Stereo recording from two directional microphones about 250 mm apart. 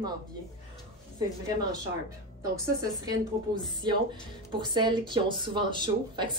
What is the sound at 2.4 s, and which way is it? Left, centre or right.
Speech, centre.